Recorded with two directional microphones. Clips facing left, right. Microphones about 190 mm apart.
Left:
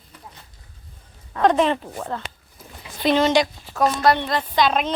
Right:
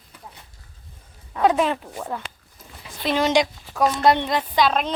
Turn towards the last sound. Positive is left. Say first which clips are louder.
# left 1 dB
turn(degrees=0)  # may be behind; listen again after turning